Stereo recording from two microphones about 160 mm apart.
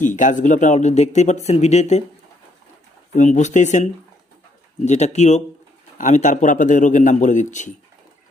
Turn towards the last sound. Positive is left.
turn(degrees=50)  # may be behind; listen again after turning